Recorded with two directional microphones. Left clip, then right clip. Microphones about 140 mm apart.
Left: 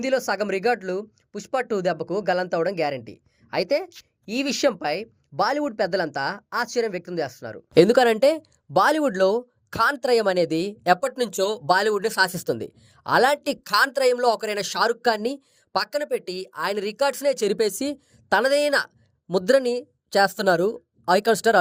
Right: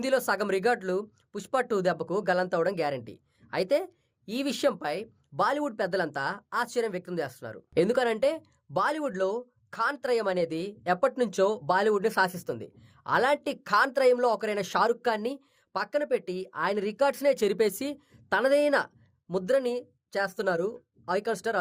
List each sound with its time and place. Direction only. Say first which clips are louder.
0.0 s speech: left 3 dB; 5° left (ahead or behind)
7.7 s speech: left 9 dB; 55° left (ahead or behind); by 18.3 s 30° left (ahead or behind)
18.3 s speech: left 4 dB; 40° left (ahead or behind)